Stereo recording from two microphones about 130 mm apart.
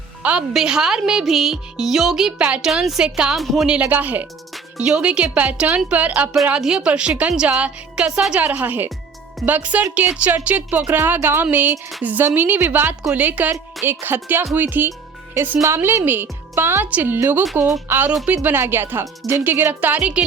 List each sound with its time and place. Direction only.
0.2 s a woman's voice: 10° right (ahead or behind)
18.1 s a woman's voice: centre (ahead or behind)
18.4 s a woman's voice: 15° right (ahead or behind)